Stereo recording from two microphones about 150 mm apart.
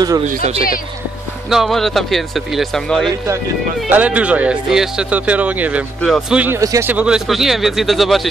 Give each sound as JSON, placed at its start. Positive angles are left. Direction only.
{"t": 0.4, "sound": "speech", "side_deg": -40}
{"t": 1.5, "sound": "speech", "side_deg": 0}
{"t": 3.9, "sound": "speech", "side_deg": -10}
{"t": 5.9, "sound": "speech", "side_deg": 5}
{"t": 6.3, "sound": "speech", "side_deg": -10}
{"t": 6.6, "sound": "speech", "side_deg": -20}
{"t": 6.9, "sound": "speech", "side_deg": -5}